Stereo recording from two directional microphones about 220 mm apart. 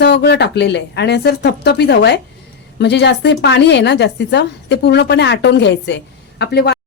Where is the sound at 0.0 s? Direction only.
50° left (ahead or behind).